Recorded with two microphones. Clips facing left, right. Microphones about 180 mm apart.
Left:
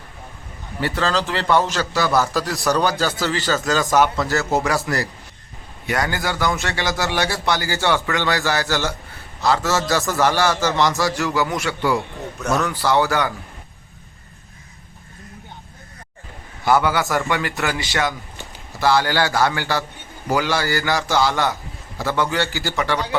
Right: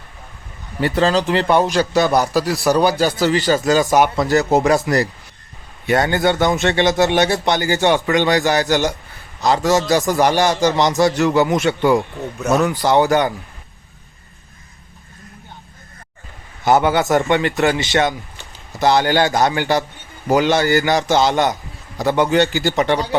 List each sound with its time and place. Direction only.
0.8 s a man's voice: 20° right (ahead or behind)
16.6 s a man's voice: 20° right (ahead or behind)